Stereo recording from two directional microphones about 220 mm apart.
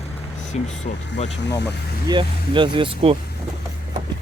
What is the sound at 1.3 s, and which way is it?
Speech, 50° left (ahead or behind).